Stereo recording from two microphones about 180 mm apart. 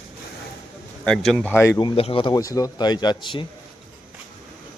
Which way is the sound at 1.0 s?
5° left (ahead or behind).